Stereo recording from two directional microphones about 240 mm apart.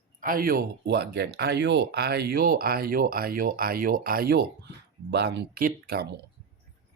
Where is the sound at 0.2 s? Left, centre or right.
Right.